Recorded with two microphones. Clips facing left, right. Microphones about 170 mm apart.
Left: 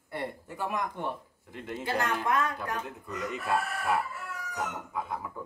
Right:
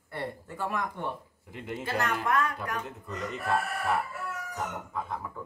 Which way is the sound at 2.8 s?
5° left (ahead or behind).